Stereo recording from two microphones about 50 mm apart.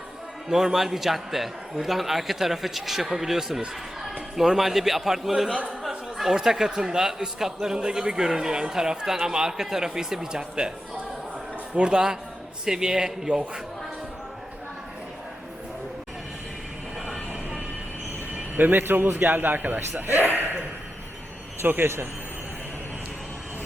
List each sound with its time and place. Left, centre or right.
0.4 s a man's voice: centre
11.7 s speech: centre
18.3 s a man's voice: right
21.6 s a man's voice: right